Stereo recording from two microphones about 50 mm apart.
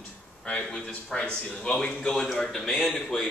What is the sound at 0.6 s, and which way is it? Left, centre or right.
A man's voice, centre.